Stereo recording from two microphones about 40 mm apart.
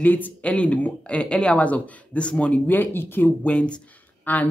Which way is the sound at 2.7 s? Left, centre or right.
Left.